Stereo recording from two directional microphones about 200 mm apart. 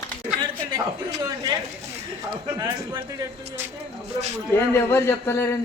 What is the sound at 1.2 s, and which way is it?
A man's voice, 20° right (ahead or behind).